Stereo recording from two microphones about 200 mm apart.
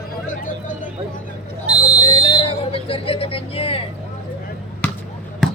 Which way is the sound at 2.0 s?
20° left (ahead or behind).